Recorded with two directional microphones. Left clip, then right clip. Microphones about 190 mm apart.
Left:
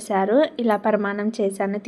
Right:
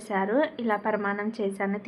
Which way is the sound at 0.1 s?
30° left (ahead or behind).